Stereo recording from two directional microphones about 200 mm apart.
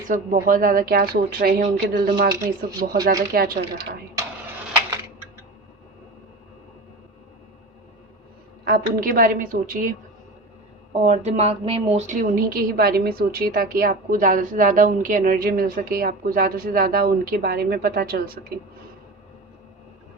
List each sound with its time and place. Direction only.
0.1 s a woman's voice: 40° right (ahead or behind)
8.6 s a woman's voice: 50° right (ahead or behind)
10.9 s a woman's voice: 35° right (ahead or behind)